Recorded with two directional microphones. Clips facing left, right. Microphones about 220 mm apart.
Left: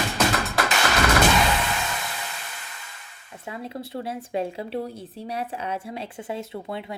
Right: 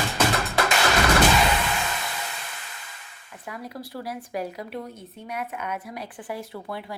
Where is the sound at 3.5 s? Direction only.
25° left (ahead or behind).